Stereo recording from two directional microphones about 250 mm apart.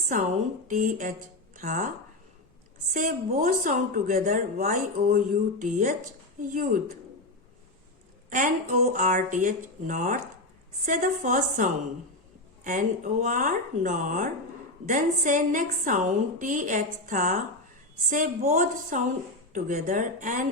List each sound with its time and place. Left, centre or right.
0.1 s a woman's voice: right
2.9 s a woman's voice: right
8.3 s a woman's voice: right
13.2 s a woman's voice: right